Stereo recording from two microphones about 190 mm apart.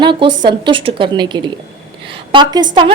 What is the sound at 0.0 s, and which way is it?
A woman's voice, 25° right (ahead or behind).